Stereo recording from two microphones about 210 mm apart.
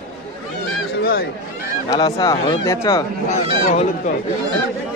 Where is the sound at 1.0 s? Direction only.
45° left (ahead or behind).